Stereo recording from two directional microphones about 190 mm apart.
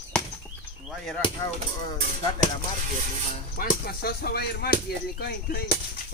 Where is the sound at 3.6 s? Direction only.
55° left (ahead or behind).